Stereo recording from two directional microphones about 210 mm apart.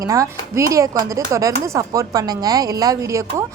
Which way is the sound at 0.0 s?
15° right (ahead or behind).